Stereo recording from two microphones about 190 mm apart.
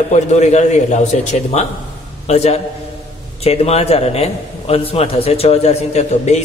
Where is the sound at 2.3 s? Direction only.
35° left (ahead or behind).